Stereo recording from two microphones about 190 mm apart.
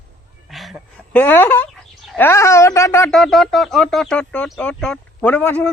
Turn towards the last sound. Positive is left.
turn(degrees=10)  # may be behind; listen again after turning